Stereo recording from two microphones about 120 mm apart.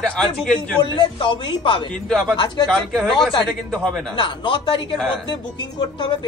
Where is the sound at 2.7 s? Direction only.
5° left (ahead or behind).